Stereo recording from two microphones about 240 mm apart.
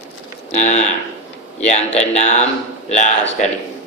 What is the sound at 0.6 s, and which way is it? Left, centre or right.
Speech, left.